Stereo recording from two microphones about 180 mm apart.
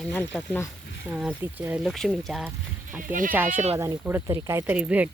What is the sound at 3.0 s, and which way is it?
Speech, 50° right (ahead or behind).